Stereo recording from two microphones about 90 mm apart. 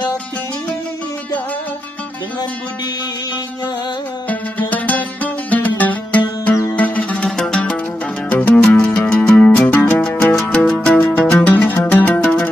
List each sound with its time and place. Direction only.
4.3 s music: 20° left (ahead or behind)